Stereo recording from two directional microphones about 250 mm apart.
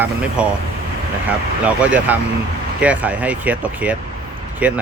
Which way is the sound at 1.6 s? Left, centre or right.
Centre.